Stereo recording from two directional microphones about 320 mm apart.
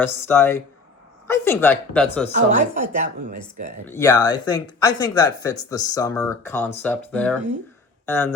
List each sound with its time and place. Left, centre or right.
0.0 s speech: centre
2.3 s a woman's voice: right
3.8 s speech: centre